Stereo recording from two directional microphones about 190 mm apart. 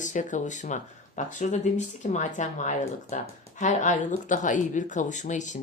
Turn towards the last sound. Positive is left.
turn(degrees=40)  # may be behind; listen again after turning